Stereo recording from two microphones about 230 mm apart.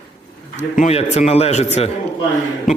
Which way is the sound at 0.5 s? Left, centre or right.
Left.